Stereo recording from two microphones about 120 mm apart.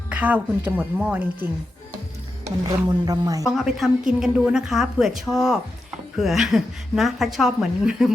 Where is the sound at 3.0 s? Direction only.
30° right (ahead or behind).